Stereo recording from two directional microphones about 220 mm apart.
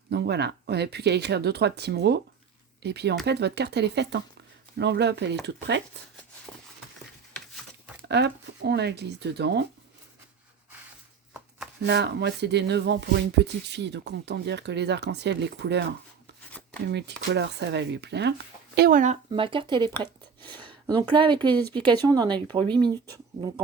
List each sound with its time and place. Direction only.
0.1 s speech: 50° right (ahead or behind)
8.0 s speech: 50° right (ahead or behind)
11.8 s speech: 50° right (ahead or behind); by 19.2 s 35° right (ahead or behind)
19.3 s speech: 20° right (ahead or behind)